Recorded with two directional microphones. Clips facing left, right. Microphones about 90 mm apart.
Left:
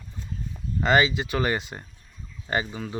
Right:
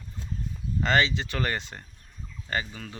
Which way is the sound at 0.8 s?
10° left (ahead or behind).